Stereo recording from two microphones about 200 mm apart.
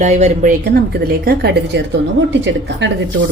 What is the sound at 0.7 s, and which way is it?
A woman's voice, 50° right (ahead or behind).